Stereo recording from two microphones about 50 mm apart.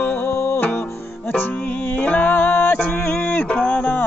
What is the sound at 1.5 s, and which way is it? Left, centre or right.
Music, left.